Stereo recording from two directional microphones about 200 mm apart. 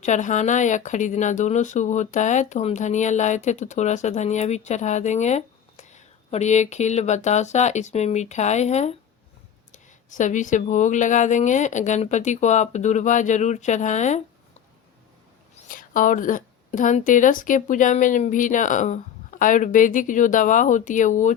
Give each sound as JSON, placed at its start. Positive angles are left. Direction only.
{"t": 0.0, "sound": "speech", "side_deg": 35}
{"t": 15.7, "sound": "speech", "side_deg": 45}